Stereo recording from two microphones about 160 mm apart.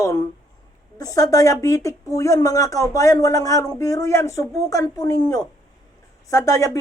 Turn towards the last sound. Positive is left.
turn(degrees=20)  # may be behind; listen again after turning